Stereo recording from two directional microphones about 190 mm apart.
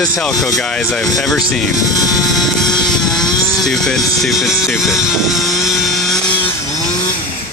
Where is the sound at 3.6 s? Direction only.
Centre (ahead or behind).